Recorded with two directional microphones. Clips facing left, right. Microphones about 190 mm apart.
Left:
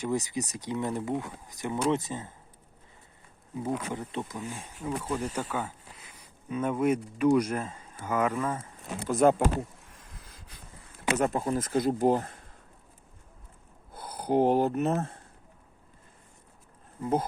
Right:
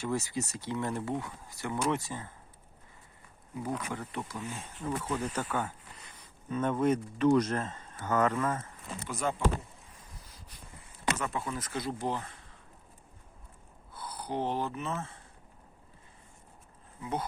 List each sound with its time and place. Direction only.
0.0 s speech: 15° left (ahead or behind)
3.8 s speech: 20° left (ahead or behind)
9.0 s speech: 55° left (ahead or behind)
11.2 s speech: 45° left (ahead or behind)
14.2 s speech: 50° left (ahead or behind)
17.0 s speech: 45° left (ahead or behind)